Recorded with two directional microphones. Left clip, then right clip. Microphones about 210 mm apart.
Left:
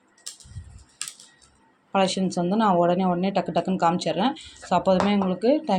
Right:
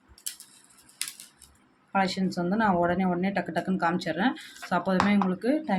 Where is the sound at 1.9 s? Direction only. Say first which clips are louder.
Left 4 dB; 20° left (ahead or behind).